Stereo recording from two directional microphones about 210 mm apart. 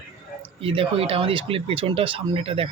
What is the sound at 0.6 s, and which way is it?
Speech, 25° right (ahead or behind).